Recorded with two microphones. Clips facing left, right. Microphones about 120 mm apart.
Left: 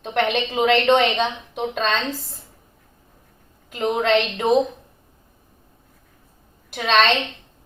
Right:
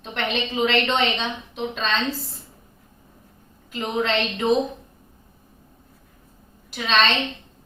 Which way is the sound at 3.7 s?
50° left (ahead or behind).